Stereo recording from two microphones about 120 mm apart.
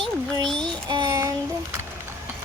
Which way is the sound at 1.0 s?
25° right (ahead or behind).